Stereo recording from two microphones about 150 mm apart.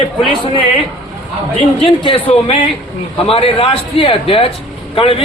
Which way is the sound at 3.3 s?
40° left (ahead or behind).